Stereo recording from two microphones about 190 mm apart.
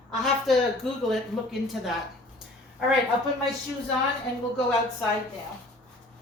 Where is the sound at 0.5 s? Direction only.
Centre (ahead or behind).